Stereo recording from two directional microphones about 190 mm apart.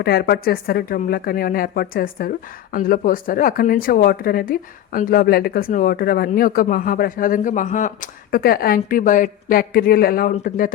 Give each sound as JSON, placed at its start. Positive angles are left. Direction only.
{"t": 0.0, "sound": "speech", "side_deg": 55}